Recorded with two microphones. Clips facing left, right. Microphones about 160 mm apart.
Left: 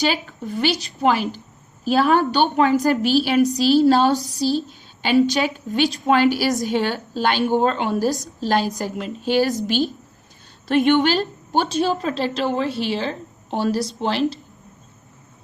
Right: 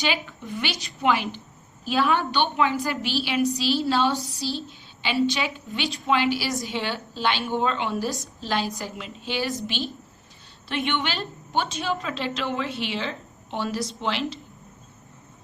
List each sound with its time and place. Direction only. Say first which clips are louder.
0.0 s a woman's voice: left 5 dB; 40° left (ahead or behind)